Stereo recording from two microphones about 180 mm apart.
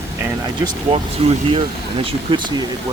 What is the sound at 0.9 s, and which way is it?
Speech, 35° right (ahead or behind).